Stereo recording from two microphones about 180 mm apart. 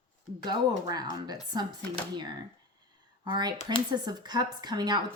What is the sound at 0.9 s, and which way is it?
Speech, 20° right (ahead or behind).